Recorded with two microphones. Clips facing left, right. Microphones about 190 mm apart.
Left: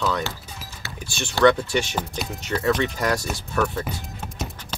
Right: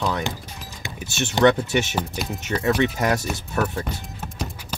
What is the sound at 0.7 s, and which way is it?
Speech, 15° right (ahead or behind).